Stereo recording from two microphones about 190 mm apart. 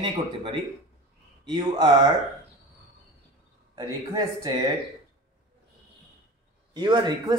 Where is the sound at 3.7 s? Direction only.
20° right (ahead or behind).